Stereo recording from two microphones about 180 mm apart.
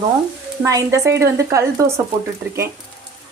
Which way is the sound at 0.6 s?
15° right (ahead or behind).